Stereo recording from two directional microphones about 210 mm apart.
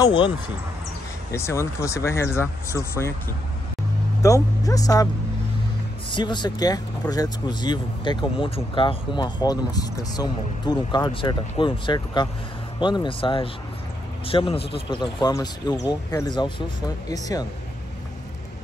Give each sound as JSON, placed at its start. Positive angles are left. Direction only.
{"t": 0.0, "sound": "speech", "side_deg": 25}
{"t": 1.3, "sound": "speech", "side_deg": 15}
{"t": 4.2, "sound": "speech", "side_deg": 15}
{"t": 6.0, "sound": "speech", "side_deg": 20}